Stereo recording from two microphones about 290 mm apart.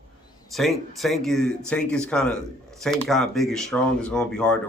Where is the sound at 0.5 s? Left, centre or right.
Centre.